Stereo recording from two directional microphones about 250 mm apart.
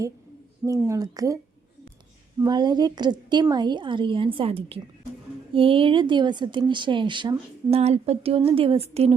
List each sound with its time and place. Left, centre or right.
0.6 s a woman's voice: centre
2.4 s a woman's voice: centre